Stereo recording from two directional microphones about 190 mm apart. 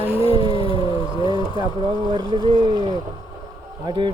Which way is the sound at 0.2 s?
30° left (ahead or behind).